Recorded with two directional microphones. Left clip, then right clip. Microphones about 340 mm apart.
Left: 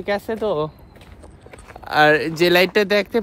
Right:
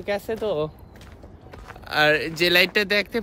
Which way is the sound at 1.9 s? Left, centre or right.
Centre.